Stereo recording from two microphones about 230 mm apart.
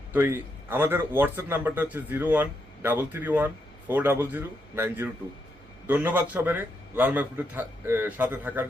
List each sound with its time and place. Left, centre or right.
0.1 s a man's voice: centre